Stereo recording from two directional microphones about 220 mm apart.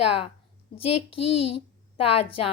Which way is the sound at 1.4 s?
25° left (ahead or behind).